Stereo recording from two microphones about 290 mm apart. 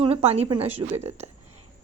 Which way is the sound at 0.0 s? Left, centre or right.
Centre.